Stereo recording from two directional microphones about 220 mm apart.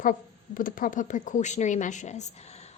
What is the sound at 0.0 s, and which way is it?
Speech, 40° left (ahead or behind).